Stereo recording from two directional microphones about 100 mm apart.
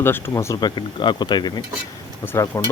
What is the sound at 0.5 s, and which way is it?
Speech, 45° left (ahead or behind).